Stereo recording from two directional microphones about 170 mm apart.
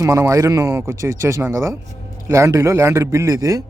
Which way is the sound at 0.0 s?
20° right (ahead or behind).